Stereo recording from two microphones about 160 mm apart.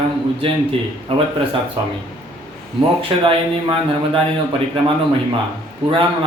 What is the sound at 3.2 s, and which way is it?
A man's voice, 35° right (ahead or behind).